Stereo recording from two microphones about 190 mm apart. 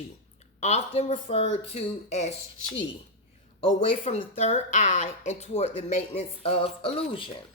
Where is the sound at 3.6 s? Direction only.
35° left (ahead or behind).